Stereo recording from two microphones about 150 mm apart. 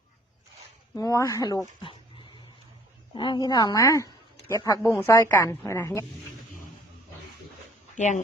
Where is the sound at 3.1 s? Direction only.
35° left (ahead or behind).